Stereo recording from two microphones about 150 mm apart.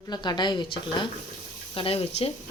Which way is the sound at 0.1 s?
30° left (ahead or behind).